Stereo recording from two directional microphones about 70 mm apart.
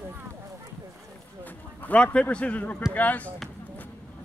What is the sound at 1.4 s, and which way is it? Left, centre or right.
Speech, left.